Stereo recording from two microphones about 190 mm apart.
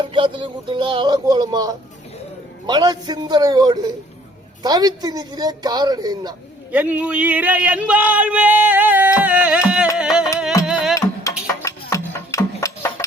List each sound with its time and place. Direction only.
0.0 s a woman's voice: 25° right (ahead or behind)
6.7 s a man's voice: 10° right (ahead or behind)
10.7 s music: 5° right (ahead or behind)
10.9 s music: 15° left (ahead or behind)